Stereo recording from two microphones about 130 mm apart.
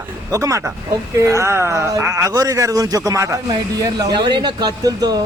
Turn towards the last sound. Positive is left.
turn(degrees=-30)  # may be behind; listen again after turning